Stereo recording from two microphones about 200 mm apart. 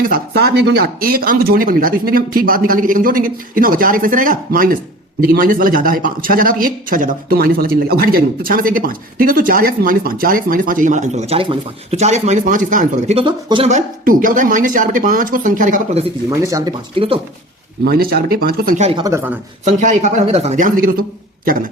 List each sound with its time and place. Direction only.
0.0 s speech: 50° right (ahead or behind)
13.2 s speech: 25° right (ahead or behind)
16.3 s speech: 15° right (ahead or behind)
17.8 s speech: 50° right (ahead or behind)
18.8 s speech: 30° right (ahead or behind)
19.0 s speech: 15° right (ahead or behind)
19.6 s speech: 40° right (ahead or behind)